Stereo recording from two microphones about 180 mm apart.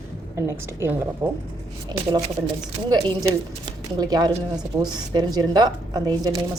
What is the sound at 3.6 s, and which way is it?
Speech, 20° right (ahead or behind).